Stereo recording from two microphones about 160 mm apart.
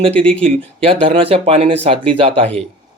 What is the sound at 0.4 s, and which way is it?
Speech, 35° right (ahead or behind).